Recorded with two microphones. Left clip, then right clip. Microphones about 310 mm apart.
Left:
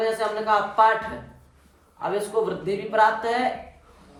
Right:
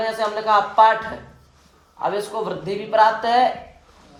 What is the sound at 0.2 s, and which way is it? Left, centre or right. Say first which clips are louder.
Speech: right 4 dB; centre.